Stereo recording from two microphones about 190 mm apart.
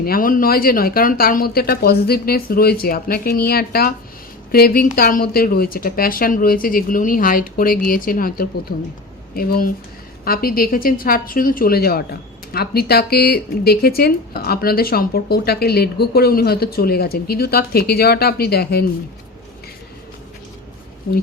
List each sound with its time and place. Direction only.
0.0 s a woman's voice: 50° left (ahead or behind)